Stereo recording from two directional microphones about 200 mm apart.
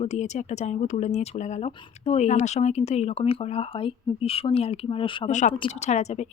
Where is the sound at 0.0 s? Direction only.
35° left (ahead or behind).